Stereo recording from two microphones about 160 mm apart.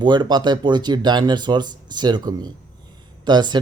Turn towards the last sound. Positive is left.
turn(degrees=-25)  # may be behind; listen again after turning